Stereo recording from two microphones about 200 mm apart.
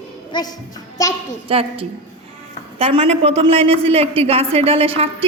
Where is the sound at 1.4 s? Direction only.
25° right (ahead or behind).